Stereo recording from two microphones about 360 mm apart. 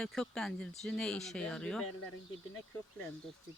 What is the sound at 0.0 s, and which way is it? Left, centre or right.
Speech, centre.